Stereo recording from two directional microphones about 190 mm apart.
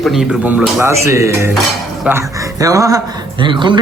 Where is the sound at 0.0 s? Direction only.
Centre (ahead or behind).